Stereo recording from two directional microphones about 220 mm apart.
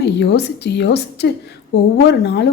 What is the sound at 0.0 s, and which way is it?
Speech, 50° left (ahead or behind).